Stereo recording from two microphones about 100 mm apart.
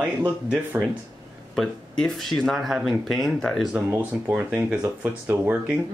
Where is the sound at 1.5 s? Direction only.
5° left (ahead or behind).